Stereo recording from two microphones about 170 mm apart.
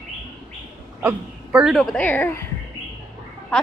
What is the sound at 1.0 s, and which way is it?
A woman's voice, 5° right (ahead or behind).